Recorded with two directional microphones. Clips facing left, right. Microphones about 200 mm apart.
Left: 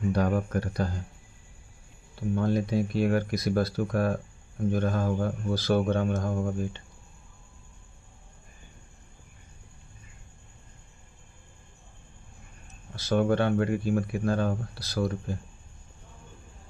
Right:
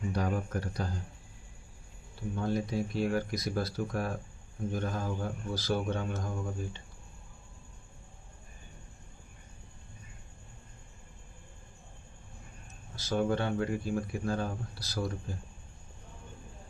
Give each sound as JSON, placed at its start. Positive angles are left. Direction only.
{"t": 0.1, "sound": "speech", "side_deg": 65}
{"t": 2.3, "sound": "speech", "side_deg": 65}
{"t": 13.0, "sound": "speech", "side_deg": 65}